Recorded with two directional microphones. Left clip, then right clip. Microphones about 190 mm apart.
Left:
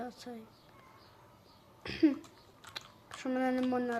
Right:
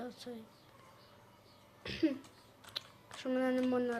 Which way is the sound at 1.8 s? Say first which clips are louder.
Left 5 dB; 10° left (ahead or behind).